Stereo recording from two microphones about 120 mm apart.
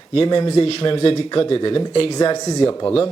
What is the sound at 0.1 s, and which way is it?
A man's voice, 45° left (ahead or behind).